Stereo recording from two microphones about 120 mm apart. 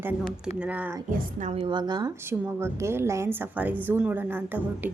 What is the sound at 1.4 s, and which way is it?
Speech, 90° right.